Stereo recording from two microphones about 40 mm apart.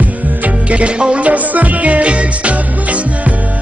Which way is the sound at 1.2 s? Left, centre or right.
Right.